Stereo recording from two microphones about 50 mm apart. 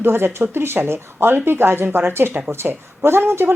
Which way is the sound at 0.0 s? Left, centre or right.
Right.